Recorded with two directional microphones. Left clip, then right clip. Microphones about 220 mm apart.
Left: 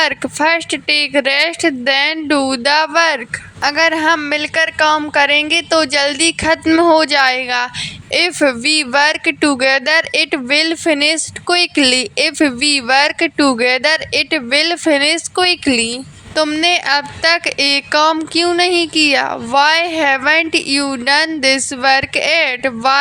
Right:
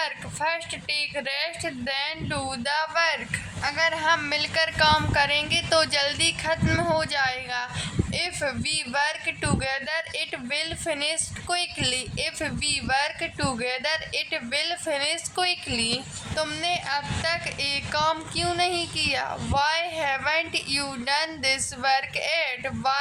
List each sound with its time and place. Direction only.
0.0 s a woman's voice: 40° left (ahead or behind)